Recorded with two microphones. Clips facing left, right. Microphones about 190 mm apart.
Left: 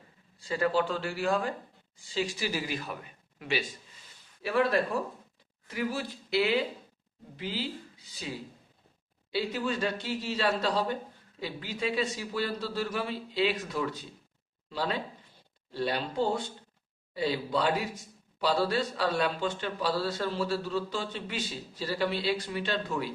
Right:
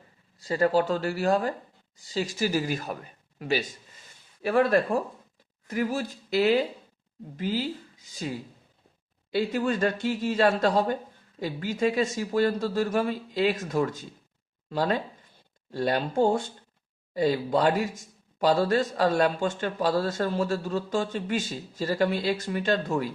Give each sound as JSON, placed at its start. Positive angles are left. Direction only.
{"t": 0.3, "sound": "speech", "side_deg": -40}